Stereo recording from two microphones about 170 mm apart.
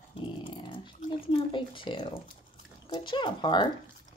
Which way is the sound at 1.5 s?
30° left (ahead or behind).